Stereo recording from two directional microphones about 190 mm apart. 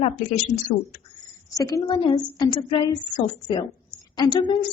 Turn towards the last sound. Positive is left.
turn(degrees=25)  # may be behind; listen again after turning